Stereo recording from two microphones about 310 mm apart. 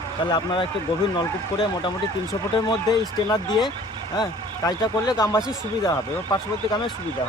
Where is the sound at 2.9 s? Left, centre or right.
Centre.